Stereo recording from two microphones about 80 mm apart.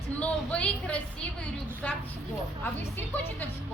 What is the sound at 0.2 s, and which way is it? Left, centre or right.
Speech, centre.